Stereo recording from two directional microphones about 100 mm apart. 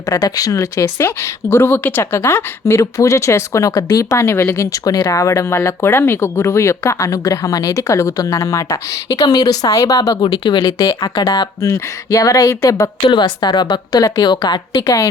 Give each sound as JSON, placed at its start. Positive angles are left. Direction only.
{"t": 0.1, "sound": "speech", "side_deg": 40}
{"t": 13.1, "sound": "a woman's voice", "side_deg": 45}